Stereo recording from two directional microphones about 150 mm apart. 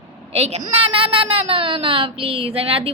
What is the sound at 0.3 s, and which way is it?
A woman's voice, 45° right (ahead or behind).